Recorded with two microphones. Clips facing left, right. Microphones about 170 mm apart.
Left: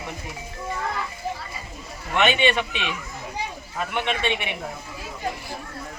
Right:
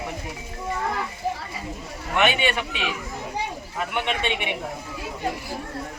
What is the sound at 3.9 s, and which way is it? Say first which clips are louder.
Speech: left 1 dB; 15° right (ahead or behind).